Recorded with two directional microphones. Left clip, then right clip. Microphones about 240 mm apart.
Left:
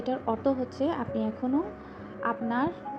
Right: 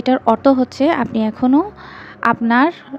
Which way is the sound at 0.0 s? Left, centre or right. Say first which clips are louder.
Right 15 dB; right.